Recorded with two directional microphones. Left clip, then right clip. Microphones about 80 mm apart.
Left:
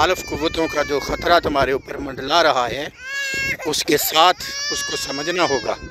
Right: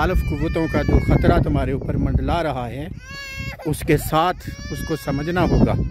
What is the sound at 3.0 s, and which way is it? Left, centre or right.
Baby cry, right.